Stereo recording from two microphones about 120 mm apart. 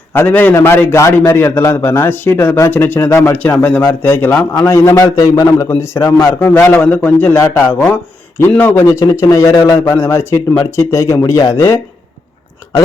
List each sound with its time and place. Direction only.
0.1 s a man's voice: 15° left (ahead or behind)
3.3 s a man's voice: 15° left (ahead or behind)
7.3 s a man's voice: 25° left (ahead or behind)